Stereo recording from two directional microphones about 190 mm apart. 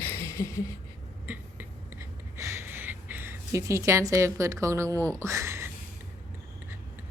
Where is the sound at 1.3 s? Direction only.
15° right (ahead or behind).